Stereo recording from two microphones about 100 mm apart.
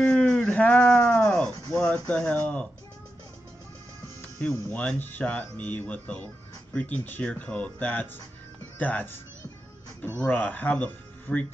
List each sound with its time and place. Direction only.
0.0 s a sound: 10° left (ahead or behind)
4.6 s speech: 15° left (ahead or behind)
10.2 s speech: 15° left (ahead or behind)